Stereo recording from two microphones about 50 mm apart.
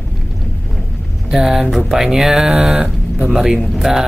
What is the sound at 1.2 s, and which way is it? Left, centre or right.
Speech, centre.